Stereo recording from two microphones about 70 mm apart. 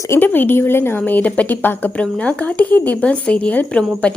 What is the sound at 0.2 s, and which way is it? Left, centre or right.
A woman's voice, left.